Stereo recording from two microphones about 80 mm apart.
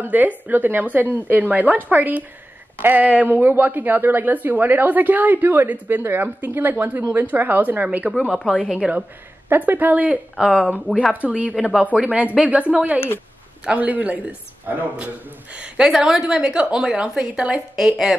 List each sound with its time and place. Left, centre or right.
0.0 s a woman's voice: right
8.1 s speech: centre
8.8 s a woman's voice: centre
9.5 s a woman's voice: right
10.3 s a woman's voice: centre
10.9 s speech: centre
11.1 s a woman's voice: centre
15.5 s a woman's voice: centre